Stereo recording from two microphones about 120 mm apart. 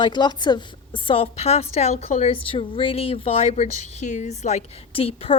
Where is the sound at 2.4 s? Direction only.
50° left (ahead or behind).